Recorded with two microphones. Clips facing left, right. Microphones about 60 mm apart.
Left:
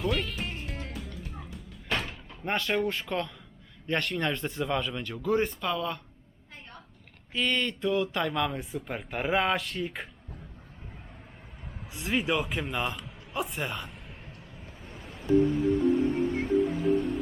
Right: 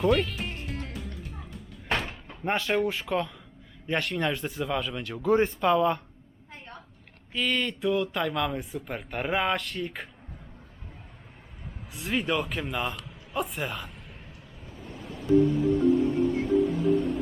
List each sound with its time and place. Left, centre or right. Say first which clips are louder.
0.0 s music: right 6 dB; centre
2.0 s door: right 2 dB; right
2.5 s speech: right 2 dB; centre
5.2 s speech: right 5 dB; right
7.3 s speech: right 1 dB; centre
11.9 s speech: even; centre
14.7 s ocean: right 6 dB; centre